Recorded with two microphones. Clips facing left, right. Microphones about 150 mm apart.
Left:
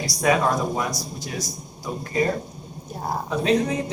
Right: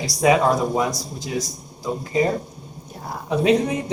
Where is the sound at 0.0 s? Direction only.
15° right (ahead or behind).